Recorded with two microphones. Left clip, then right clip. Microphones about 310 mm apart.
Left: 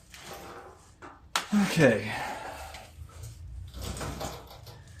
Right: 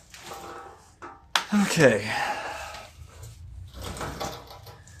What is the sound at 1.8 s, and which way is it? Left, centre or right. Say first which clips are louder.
Speech: right 4 dB; right.